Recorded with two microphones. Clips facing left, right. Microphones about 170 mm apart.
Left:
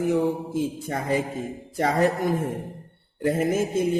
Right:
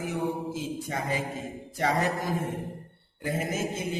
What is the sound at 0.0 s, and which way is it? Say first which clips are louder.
Mantra: left 7 dB; 55° left (ahead or behind).